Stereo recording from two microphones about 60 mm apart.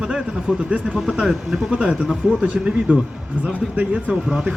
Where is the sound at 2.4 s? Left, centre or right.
Centre.